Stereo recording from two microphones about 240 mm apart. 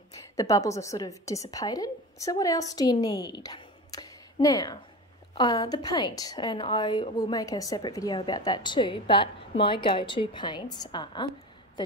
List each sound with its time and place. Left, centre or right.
0.4 s a woman's voice: centre